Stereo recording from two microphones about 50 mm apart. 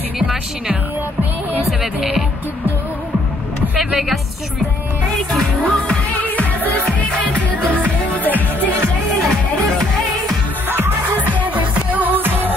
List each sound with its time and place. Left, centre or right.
1.7 s speech: centre
3.7 s music: centre
5.3 s music: centre
6.1 s music: left
8.1 s music: left
10.7 s music: right
11.3 s music: right